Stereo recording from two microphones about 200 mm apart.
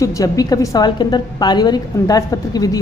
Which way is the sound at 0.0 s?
15° left (ahead or behind).